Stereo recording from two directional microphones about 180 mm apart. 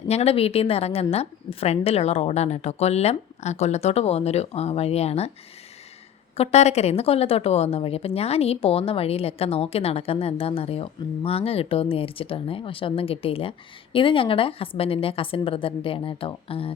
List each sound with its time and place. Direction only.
0.1 s a woman's voice: 35° left (ahead or behind)
6.3 s a woman's voice: 35° left (ahead or behind)